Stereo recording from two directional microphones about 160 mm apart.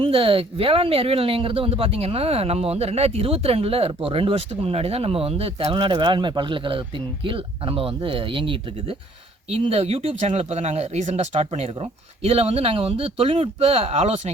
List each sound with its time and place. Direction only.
0.0 s speech: 35° right (ahead or behind)